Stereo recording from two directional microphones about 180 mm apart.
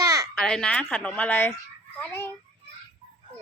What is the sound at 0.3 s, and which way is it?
Speech, 5° left (ahead or behind).